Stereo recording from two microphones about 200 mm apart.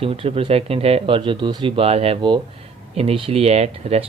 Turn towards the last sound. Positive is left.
turn(degrees=-30)  # may be behind; listen again after turning